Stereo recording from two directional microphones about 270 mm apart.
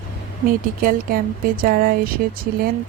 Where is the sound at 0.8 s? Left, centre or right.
Right.